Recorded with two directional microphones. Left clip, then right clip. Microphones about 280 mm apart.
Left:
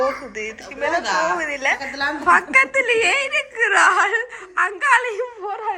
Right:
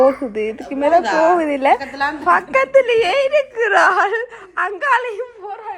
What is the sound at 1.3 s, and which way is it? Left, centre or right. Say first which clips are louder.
A woman's voice: right 6 dB; centre.